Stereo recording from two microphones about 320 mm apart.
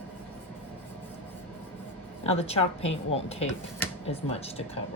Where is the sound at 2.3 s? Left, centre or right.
Centre.